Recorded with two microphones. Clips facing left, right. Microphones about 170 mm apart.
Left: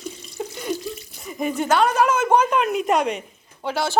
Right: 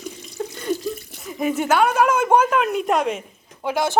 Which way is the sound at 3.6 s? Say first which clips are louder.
Right 2 dB; 15° right (ahead or behind).